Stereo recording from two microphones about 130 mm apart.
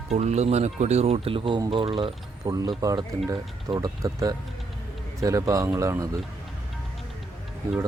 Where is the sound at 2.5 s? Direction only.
25° right (ahead or behind).